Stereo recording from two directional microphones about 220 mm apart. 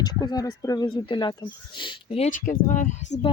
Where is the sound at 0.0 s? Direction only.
20° left (ahead or behind).